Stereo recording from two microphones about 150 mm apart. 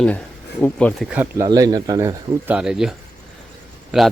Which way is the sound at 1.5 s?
25° right (ahead or behind).